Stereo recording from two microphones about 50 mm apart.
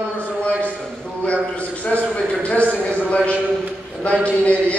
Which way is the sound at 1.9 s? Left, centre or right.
Left.